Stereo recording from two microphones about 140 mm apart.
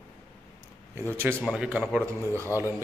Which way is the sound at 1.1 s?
15° right (ahead or behind).